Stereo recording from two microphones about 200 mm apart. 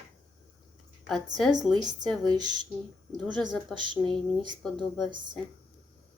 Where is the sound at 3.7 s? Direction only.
5° left (ahead or behind).